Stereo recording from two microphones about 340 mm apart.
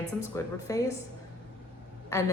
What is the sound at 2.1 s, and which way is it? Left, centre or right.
Speech, centre.